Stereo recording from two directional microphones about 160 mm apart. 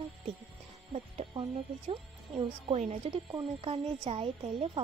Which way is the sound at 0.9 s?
40° right (ahead or behind).